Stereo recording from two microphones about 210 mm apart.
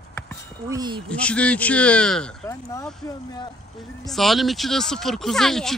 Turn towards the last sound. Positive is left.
turn(degrees=0)  # may be behind; listen again after turning